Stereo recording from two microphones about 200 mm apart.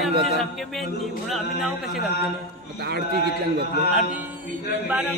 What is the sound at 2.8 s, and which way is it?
Speech, 50° right (ahead or behind).